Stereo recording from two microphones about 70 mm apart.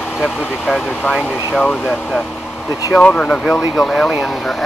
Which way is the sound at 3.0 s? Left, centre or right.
Centre.